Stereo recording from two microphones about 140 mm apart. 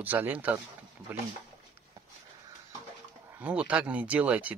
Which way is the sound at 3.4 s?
10° right (ahead or behind).